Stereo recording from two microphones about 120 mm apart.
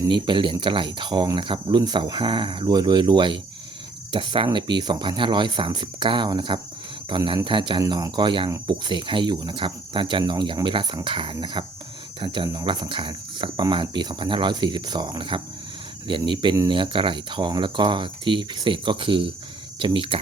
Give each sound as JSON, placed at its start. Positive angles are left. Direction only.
{"t": 0.1, "sound": "speech", "side_deg": -40}